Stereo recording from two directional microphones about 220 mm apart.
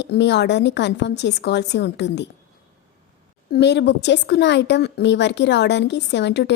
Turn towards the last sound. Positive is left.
turn(degrees=50)  # may be behind; listen again after turning